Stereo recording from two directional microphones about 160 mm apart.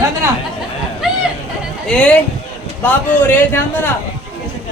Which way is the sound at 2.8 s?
15° left (ahead or behind).